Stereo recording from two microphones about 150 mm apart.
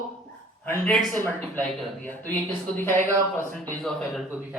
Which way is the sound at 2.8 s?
15° left (ahead or behind).